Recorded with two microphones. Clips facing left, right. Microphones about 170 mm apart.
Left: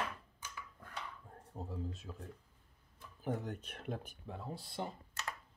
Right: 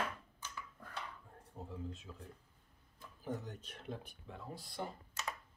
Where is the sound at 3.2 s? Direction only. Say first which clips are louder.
Left 4 dB; 55° left (ahead or behind).